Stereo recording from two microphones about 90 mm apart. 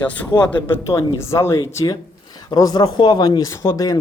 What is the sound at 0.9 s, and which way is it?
Speech, 30° left (ahead or behind).